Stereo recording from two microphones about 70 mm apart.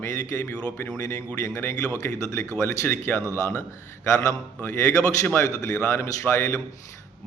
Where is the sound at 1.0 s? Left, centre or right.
Left.